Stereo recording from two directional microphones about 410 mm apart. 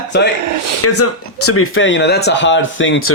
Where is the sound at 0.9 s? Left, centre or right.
Left.